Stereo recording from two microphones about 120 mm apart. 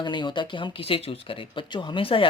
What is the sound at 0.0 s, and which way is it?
Speech, 40° left (ahead or behind).